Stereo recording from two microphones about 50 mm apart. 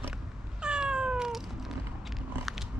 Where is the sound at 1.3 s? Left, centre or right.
Centre.